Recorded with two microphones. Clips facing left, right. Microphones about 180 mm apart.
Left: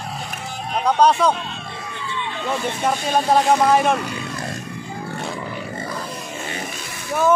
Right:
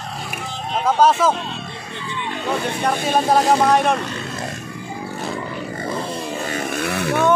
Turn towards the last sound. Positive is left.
turn(degrees=-70)  # may be behind; listen again after turning